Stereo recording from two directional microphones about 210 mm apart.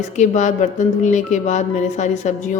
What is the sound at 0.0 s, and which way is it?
Speech, 35° left (ahead or behind).